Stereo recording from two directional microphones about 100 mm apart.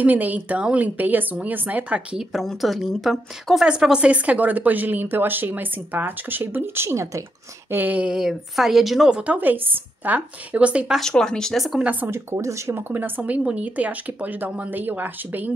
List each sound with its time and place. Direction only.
0.0 s a woman's voice: 15° right (ahead or behind)
2.3 s a woman's voice: centre (ahead or behind); by 7.2 s 30° right (ahead or behind)
7.7 s a woman's voice: 15° right (ahead or behind)
11.0 s speech: 5° left (ahead or behind)
11.9 s a woman's voice: 20° right (ahead or behind)